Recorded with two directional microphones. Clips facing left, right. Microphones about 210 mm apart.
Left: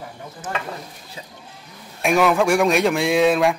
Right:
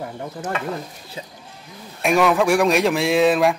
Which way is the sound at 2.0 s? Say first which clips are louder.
Even; centre (ahead or behind).